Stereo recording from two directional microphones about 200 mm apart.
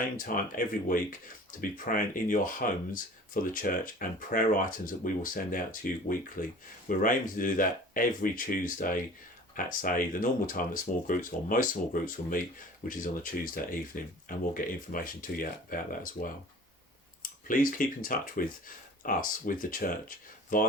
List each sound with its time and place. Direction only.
0.0 s speech: 45° left (ahead or behind)
17.5 s speech: 45° left (ahead or behind)